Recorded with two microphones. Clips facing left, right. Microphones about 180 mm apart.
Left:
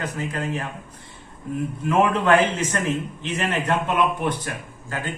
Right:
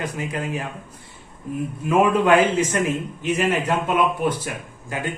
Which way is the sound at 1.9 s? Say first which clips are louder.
Right 2 dB; 10° right (ahead or behind).